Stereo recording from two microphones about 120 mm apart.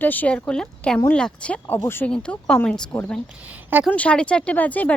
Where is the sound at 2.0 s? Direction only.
10° left (ahead or behind).